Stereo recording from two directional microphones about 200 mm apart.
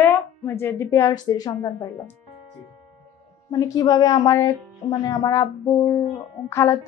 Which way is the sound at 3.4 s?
15° left (ahead or behind).